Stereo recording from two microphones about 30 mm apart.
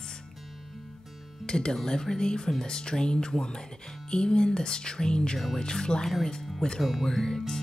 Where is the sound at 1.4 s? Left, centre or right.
Left.